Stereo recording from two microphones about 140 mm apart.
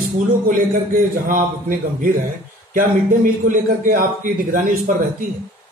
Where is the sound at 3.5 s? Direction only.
75° right (ahead or behind).